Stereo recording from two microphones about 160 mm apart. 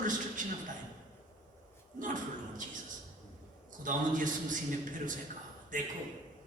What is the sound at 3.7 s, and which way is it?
A man's voice, 55° right (ahead or behind).